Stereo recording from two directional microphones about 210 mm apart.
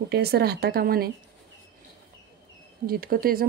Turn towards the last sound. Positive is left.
turn(degrees=-45)  # may be behind; listen again after turning